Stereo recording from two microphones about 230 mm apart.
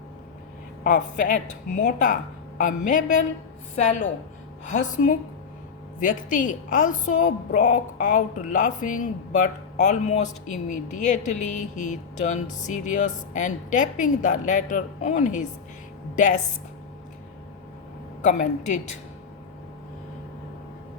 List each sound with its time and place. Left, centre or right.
0.9 s a woman's voice: left
18.2 s a woman's voice: left